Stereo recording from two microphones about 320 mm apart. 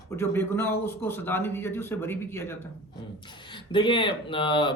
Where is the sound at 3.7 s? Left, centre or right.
Centre.